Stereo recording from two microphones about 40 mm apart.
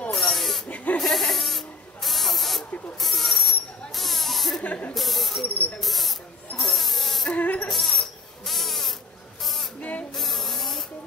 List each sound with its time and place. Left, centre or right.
0.1 s a sound: centre
0.7 s snake: left
0.9 s insect: centre
2.0 s spray: centre
3.0 s a sound: centre
4.9 s speech: centre
6.5 s a sound: centre
7.3 s mosquito: left
7.7 s crying: centre
9.4 s spray: centre
9.8 s spray: left
10.1 s spray: centre